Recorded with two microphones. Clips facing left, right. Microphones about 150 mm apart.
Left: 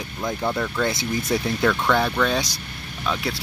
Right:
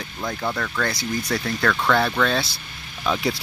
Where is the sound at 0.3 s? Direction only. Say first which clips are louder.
Left 2 dB; 15° left (ahead or behind).